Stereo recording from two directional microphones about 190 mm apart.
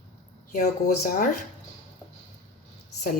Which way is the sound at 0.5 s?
50° left (ahead or behind).